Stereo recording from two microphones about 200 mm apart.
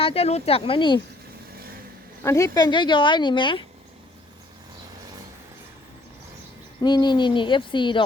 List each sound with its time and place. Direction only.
0.0 s speech: 30° left (ahead or behind)
2.2 s speech: 15° left (ahead or behind)
6.8 s speech: 20° left (ahead or behind)